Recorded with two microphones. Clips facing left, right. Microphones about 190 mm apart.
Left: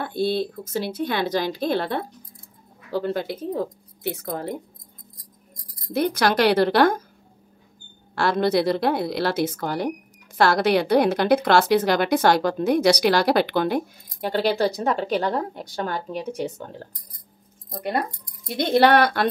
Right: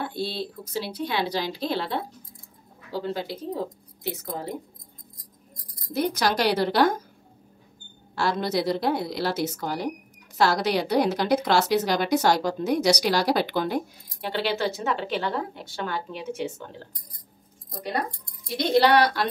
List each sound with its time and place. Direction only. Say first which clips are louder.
0.0 s a woman's voice: left 6 dB; 55° left (ahead or behind)
5.9 s a woman's voice: left 4 dB; 55° left (ahead or behind)
8.1 s a woman's voice: left 5 dB; 60° left (ahead or behind)
14.2 s a woman's voice: left 5 dB; 45° left (ahead or behind)
18.5 s a woman's voice: left 2 dB; 55° left (ahead or behind)